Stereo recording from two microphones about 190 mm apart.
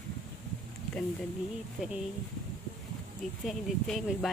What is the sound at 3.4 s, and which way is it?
Speech, centre (ahead or behind).